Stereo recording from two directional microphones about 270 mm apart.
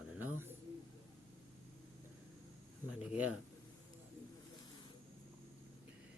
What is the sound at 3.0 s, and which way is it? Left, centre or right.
Speech, centre.